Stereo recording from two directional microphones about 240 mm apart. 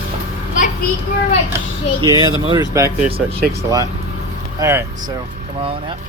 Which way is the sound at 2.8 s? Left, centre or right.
Centre.